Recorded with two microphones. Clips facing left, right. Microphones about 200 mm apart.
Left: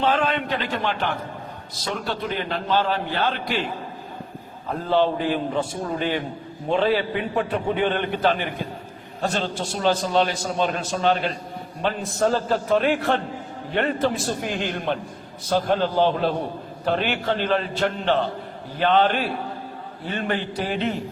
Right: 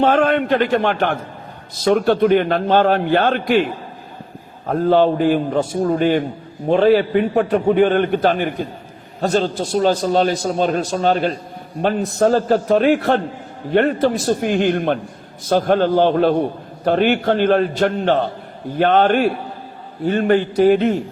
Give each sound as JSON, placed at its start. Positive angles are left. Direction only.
{"t": 0.0, "sound": "a man's voice", "side_deg": -50}
{"t": 4.7, "sound": "a man's voice", "side_deg": -50}